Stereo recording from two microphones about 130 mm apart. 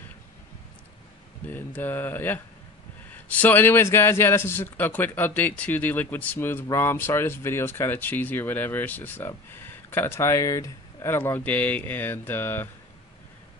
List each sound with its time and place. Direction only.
1.5 s a man's voice: 15° left (ahead or behind)